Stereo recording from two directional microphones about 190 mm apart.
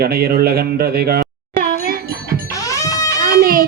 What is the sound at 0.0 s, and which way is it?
A man's voice, 55° right (ahead or behind).